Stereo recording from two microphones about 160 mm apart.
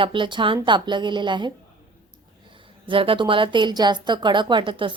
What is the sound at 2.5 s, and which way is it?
A woman's voice, 35° right (ahead or behind).